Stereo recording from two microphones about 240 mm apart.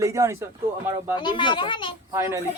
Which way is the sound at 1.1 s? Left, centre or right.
Centre.